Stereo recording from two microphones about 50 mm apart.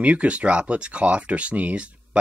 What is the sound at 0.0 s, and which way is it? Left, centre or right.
Speech, right.